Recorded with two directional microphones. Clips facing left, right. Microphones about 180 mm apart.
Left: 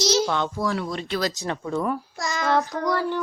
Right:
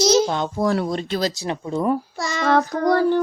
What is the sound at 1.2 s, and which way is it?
Speech, 20° right (ahead or behind).